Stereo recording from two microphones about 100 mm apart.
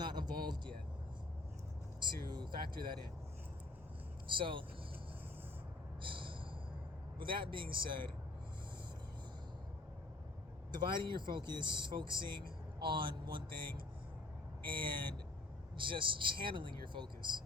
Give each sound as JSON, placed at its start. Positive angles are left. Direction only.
{"t": 0.0, "sound": "vehicle", "side_deg": -45}
{"t": 2.3, "sound": "speech", "side_deg": -45}
{"t": 4.4, "sound": "speech", "side_deg": -55}
{"t": 6.0, "sound": "a sound", "side_deg": -55}
{"t": 7.2, "sound": "speech", "side_deg": -55}
{"t": 10.7, "sound": "speech", "side_deg": -50}